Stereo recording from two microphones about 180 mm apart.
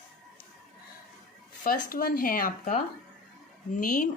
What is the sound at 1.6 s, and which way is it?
Speech, 55° left (ahead or behind).